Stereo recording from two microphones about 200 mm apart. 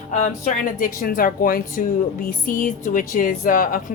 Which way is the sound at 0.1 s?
40° left (ahead or behind).